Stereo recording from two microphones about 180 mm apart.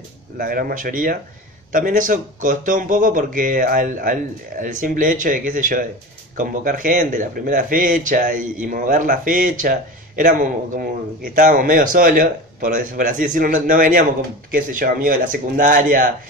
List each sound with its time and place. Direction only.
0.4 s speech: 55° right (ahead or behind)